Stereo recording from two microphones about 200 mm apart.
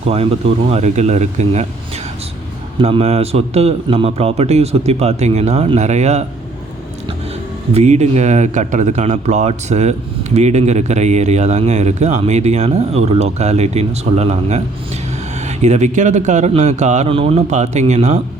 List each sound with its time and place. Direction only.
0.7 s a man's voice: 35° right (ahead or behind)
2.8 s a man's voice: 30° right (ahead or behind)
7.7 s a man's voice: 35° right (ahead or behind)